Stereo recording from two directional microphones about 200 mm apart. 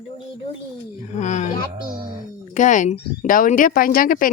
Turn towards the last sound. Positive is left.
turn(degrees=45)  # may be behind; listen again after turning